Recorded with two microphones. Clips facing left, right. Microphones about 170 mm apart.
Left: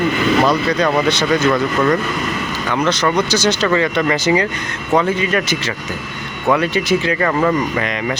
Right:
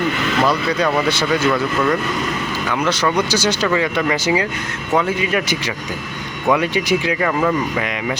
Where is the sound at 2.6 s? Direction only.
5° right (ahead or behind).